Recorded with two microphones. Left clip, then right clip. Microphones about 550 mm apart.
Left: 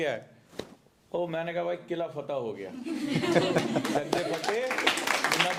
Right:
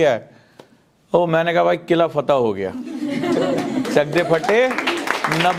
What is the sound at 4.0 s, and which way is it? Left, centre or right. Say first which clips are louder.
Speech: right 14 dB; right.